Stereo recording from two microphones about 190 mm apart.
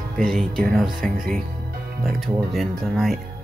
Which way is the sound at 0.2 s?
5° left (ahead or behind).